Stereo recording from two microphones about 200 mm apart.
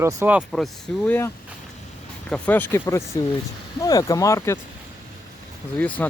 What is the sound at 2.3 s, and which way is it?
Speech, 10° left (ahead or behind).